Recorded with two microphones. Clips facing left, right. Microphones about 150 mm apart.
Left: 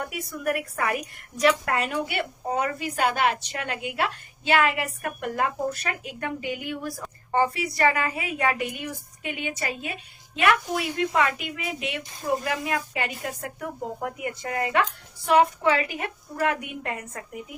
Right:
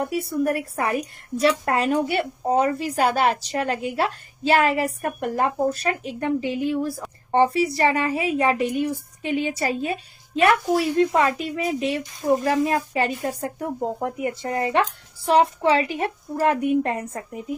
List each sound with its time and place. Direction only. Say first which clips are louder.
0.0 s a woman's voice: right 7 dB; 30° right (ahead or behind)